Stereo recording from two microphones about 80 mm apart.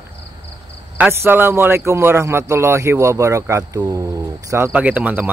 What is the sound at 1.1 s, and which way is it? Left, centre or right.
Speech, right.